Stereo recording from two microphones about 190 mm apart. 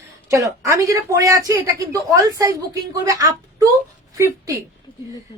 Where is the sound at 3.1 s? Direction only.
20° right (ahead or behind).